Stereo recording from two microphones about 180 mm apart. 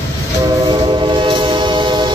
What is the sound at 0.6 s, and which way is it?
Train, 25° right (ahead or behind).